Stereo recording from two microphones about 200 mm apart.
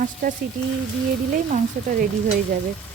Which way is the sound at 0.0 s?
45° right (ahead or behind).